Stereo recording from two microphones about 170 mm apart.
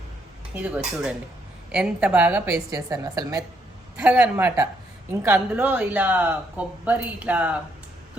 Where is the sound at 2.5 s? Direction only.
20° right (ahead or behind).